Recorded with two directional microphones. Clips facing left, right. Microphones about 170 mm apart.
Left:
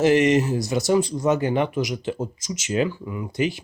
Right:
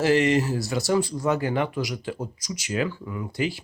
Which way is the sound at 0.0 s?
20° left (ahead or behind).